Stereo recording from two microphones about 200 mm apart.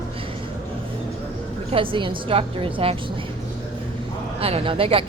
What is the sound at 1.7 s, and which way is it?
Speech, 25° right (ahead or behind).